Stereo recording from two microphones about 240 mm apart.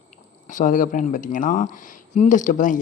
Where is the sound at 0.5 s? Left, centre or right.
Left.